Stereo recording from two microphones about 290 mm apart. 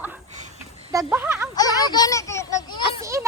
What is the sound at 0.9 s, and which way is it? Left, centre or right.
Speech, centre.